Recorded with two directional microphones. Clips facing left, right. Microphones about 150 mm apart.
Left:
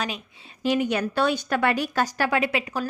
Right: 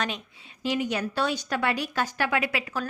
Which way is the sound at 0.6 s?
55° left (ahead or behind).